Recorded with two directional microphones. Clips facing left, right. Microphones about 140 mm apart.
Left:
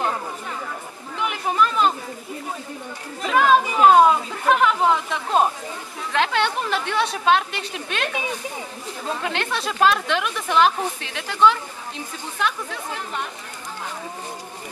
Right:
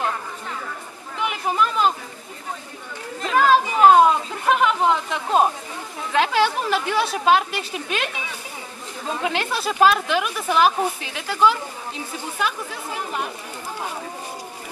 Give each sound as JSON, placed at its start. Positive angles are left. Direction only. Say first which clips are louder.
{"t": 1.2, "sound": "speech", "louder": "left 1 dB", "side_deg": 0}
{"t": 3.2, "sound": "a woman's voice", "louder": "even", "side_deg": 0}
{"t": 9.2, "sound": "a woman's voice", "louder": "right 4 dB", "side_deg": -5}